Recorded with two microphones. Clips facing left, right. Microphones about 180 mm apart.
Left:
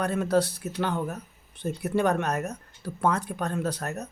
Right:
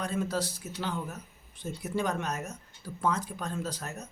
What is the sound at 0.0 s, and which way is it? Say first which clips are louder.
Speech: left 7 dB; 65° left (ahead or behind).